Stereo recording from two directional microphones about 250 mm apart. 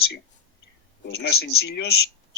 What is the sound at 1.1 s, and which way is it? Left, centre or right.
Speech, left.